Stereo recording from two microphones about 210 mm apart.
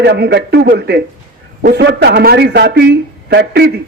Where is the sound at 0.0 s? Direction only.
50° right (ahead or behind).